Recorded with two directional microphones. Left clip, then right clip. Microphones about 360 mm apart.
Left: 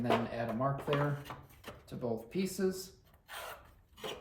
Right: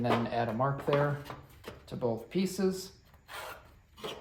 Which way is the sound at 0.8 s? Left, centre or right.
Centre.